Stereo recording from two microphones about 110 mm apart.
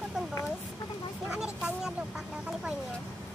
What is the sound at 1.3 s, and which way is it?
Vehicle, 10° right (ahead or behind).